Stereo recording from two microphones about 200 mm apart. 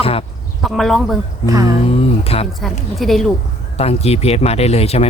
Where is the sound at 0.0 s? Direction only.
30° left (ahead or behind).